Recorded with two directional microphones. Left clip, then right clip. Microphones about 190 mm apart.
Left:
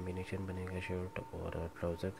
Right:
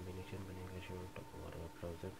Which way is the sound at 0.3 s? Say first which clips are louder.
Left 8 dB; 40° left (ahead or behind).